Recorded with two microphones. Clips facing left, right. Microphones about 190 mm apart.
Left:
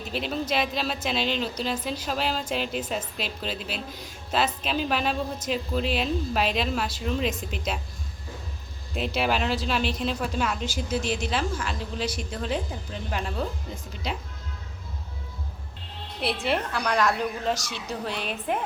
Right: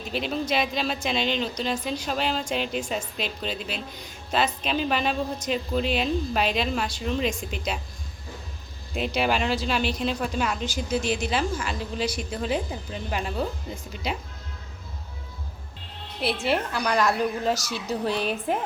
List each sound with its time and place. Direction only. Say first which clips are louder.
0.0 s speech: right 1 dB; centre (ahead or behind)
9.0 s speech: right 1 dB; centre (ahead or behind)
16.2 s speech: right 1 dB; centre (ahead or behind)
18.1 s a woman's voice: right 5 dB; 40° right (ahead or behind)